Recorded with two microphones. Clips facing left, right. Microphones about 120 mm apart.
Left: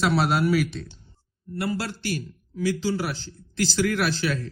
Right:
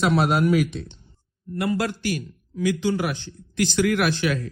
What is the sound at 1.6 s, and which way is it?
Speech, 50° right (ahead or behind).